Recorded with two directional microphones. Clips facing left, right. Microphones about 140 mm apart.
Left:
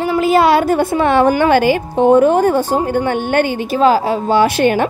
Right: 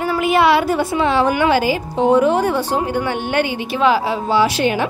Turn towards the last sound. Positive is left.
turn(degrees=50)  # may be behind; listen again after turning